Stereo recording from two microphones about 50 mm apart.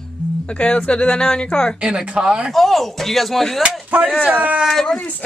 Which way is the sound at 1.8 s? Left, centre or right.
Right.